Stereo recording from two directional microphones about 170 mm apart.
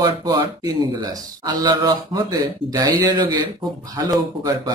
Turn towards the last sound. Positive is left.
turn(degrees=-20)  # may be behind; listen again after turning